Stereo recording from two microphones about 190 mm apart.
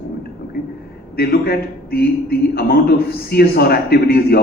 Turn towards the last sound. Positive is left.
turn(degrees=55)  # may be behind; listen again after turning